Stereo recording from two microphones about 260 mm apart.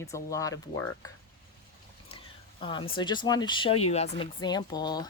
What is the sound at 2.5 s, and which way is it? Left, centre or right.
Speech, centre.